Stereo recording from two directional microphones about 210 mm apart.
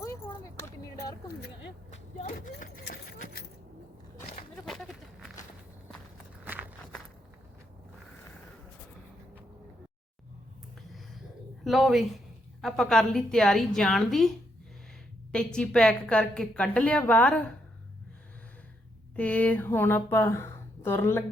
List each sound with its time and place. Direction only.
0.0 s keys jangling: 15° left (ahead or behind)
2.1 s keys jangling: 40° left (ahead or behind)
4.6 s goat: centre (ahead or behind)
6.4 s walk: 10° right (ahead or behind)
11.6 s a woman's voice: centre (ahead or behind)
15.5 s a woman's voice: 5° left (ahead or behind)
19.1 s a woman's voice: 5° left (ahead or behind)